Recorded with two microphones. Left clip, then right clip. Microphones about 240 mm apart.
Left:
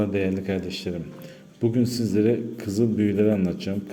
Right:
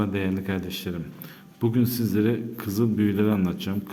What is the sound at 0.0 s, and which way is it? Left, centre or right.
A man's voice, centre.